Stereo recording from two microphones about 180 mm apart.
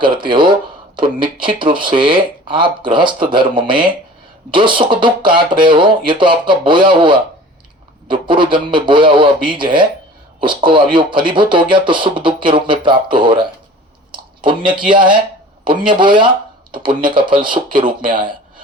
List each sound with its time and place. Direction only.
0.0 s speech: 25° right (ahead or behind)
14.1 s a sound: 25° right (ahead or behind)
14.8 s speech: 25° right (ahead or behind)